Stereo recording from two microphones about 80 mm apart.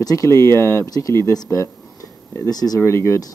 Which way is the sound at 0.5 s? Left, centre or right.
Left.